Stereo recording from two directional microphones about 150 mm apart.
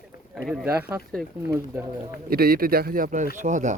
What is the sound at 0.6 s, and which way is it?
Speech, 15° right (ahead or behind).